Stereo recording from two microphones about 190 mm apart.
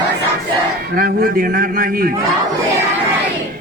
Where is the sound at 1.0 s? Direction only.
50° right (ahead or behind).